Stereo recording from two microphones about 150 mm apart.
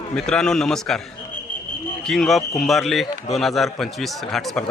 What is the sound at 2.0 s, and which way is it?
A man's voice, 5° left (ahead or behind).